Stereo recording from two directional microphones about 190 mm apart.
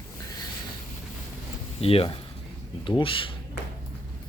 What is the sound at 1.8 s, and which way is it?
Speech, 30° left (ahead or behind).